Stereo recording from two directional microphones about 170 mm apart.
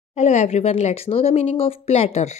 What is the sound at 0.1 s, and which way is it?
Speech, 45° left (ahead or behind).